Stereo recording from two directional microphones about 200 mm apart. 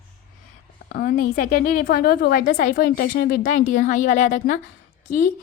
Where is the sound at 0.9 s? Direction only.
50° left (ahead or behind).